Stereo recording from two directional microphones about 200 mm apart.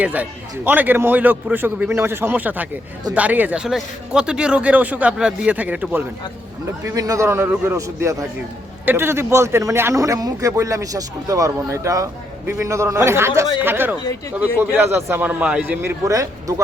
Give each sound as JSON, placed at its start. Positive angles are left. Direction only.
{"t": 0.0, "sound": "a man's voice", "side_deg": -10}